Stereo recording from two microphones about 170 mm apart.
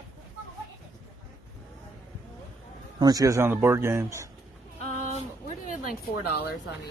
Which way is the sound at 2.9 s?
20° right (ahead or behind).